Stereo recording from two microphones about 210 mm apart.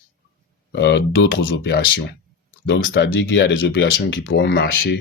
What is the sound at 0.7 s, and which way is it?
Speech, 55° left (ahead or behind).